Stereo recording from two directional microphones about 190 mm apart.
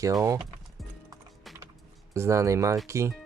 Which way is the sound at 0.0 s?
15° right (ahead or behind).